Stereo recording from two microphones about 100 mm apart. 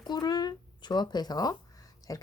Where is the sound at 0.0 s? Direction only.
45° left (ahead or behind).